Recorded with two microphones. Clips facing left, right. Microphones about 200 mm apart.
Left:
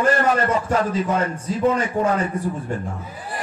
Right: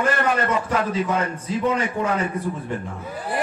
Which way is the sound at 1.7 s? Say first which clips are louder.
Left 3 dB; 40° left (ahead or behind).